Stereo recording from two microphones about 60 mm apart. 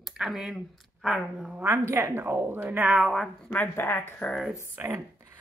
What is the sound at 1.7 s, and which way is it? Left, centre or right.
Speech, right.